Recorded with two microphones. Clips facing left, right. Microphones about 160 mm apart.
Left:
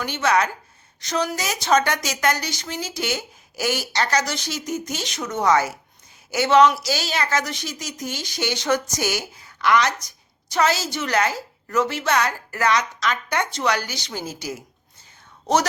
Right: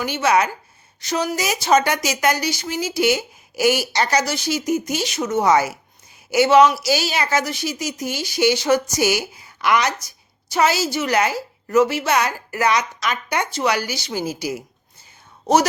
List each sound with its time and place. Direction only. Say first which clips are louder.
0.0 s a woman's voice: right 2 dB; 10° right (ahead or behind)